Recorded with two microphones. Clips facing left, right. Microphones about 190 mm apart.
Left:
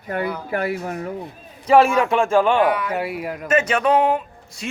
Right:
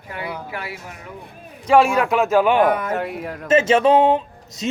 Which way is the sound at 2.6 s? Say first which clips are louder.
Right 1 dB; 45° right (ahead or behind).